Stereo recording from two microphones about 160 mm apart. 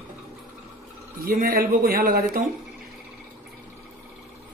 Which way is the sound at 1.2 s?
65° right (ahead or behind).